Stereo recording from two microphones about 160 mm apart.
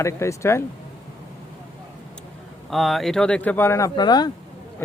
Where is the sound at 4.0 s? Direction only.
25° left (ahead or behind).